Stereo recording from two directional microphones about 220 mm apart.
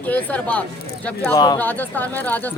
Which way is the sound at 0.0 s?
5° left (ahead or behind).